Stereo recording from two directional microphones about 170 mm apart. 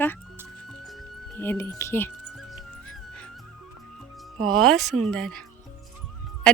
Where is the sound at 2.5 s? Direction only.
5° left (ahead or behind).